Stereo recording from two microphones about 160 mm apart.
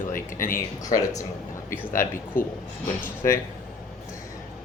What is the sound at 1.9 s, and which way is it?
Speech, 60° left (ahead or behind).